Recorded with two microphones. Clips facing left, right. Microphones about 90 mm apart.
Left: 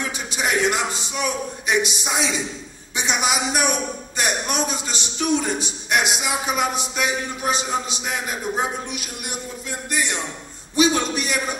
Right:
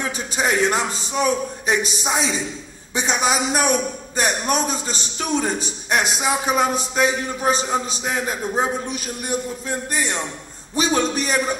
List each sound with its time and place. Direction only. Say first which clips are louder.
0.4 s a man's voice: right 2 dB; 35° right (ahead or behind)